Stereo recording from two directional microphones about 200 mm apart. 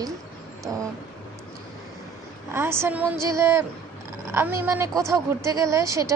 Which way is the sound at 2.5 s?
10° right (ahead or behind).